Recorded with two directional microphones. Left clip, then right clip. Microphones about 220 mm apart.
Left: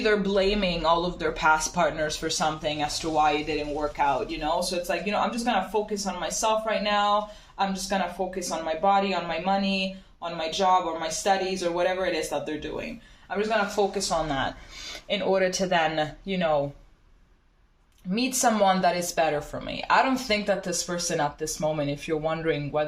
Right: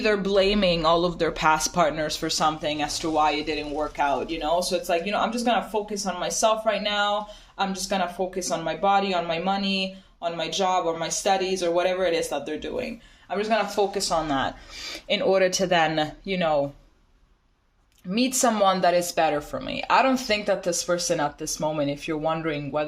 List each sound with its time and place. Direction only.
0.0 s speech: 50° right (ahead or behind)
18.1 s speech: 45° right (ahead or behind)